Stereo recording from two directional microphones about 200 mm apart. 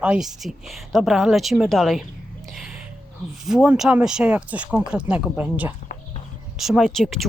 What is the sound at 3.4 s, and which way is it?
A woman's voice, 5° right (ahead or behind).